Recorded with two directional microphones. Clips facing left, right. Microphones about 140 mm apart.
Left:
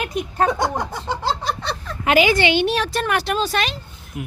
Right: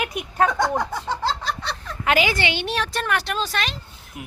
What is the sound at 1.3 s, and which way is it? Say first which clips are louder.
A woman's voice: left 3 dB; 15° left (ahead or behind).